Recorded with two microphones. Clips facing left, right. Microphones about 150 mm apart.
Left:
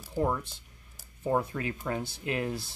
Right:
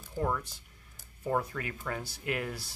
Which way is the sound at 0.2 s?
25° left (ahead or behind).